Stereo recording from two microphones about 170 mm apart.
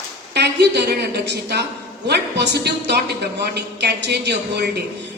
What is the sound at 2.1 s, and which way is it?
A man's voice, 80° right.